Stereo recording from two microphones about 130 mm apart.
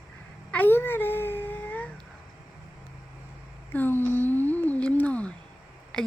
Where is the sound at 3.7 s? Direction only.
15° left (ahead or behind).